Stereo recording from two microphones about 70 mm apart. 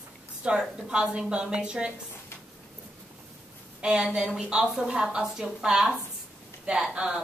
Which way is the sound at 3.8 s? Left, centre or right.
Centre.